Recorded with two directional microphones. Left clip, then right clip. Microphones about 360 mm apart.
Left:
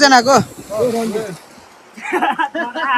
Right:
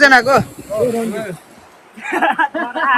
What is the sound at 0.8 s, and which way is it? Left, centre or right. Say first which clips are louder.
Speech: left 1 dB; left.